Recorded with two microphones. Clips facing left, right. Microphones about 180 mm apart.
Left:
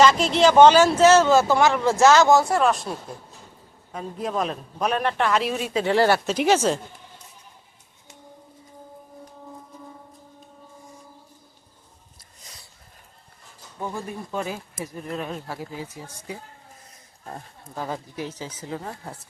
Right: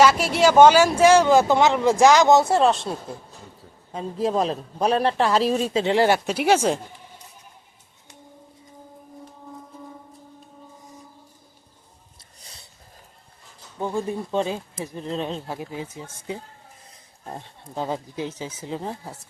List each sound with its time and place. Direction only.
0.0 s speech: 10° right (ahead or behind); by 2.9 s 25° right (ahead or behind)
3.9 s a man's voice: 30° right (ahead or behind)
5.8 s speech: 20° right (ahead or behind)
12.4 s a sound: 30° right (ahead or behind)
13.7 s speech: 20° right (ahead or behind)
19.0 s speech: centre (ahead or behind)